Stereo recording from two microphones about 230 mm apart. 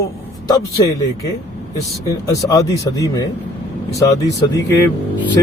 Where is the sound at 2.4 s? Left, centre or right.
Centre.